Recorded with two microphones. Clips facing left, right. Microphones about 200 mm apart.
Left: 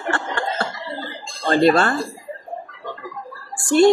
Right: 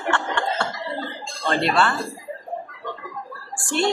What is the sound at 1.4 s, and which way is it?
Speech, 35° left (ahead or behind).